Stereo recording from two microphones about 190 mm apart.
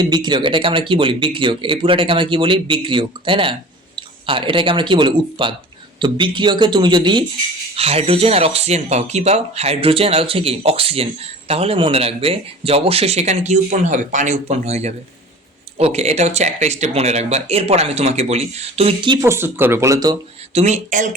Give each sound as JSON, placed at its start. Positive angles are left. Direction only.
{"t": 0.0, "sound": "speech", "side_deg": -20}
{"t": 19.2, "sound": "speech", "side_deg": -10}
{"t": 20.5, "sound": "speech", "side_deg": -35}